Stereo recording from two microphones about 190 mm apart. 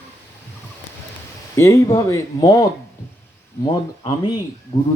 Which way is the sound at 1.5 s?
15° left (ahead or behind).